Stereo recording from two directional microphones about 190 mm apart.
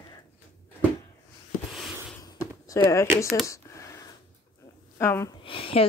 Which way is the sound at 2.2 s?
20° left (ahead or behind).